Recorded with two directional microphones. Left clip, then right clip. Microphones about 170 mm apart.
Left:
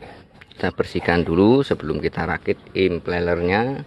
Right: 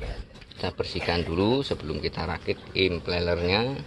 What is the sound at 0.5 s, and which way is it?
Speech, 60° left (ahead or behind).